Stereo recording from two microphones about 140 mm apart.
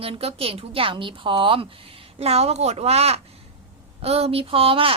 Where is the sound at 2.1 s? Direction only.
50° right (ahead or behind).